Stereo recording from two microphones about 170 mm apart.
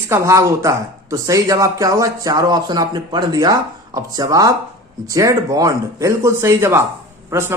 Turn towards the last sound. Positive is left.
turn(degrees=-15)  # may be behind; listen again after turning